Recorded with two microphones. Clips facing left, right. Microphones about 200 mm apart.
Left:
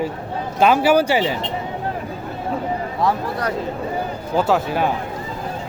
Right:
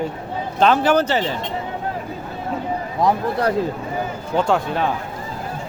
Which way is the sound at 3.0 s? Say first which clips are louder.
Right 4 dB; 25° right (ahead or behind).